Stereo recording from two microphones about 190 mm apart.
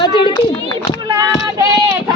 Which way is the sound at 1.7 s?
20° right (ahead or behind).